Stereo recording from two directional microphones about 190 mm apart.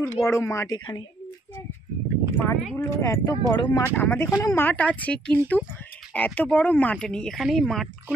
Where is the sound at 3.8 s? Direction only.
10° left (ahead or behind).